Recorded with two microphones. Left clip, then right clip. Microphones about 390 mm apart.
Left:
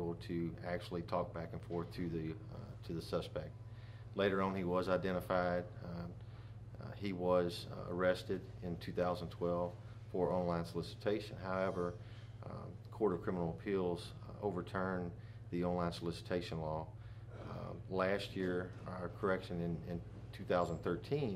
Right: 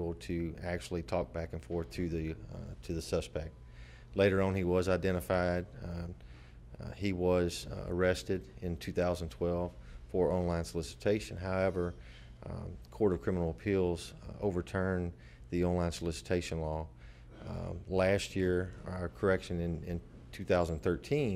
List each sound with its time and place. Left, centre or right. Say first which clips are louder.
0.2 s speech: right 4 dB; right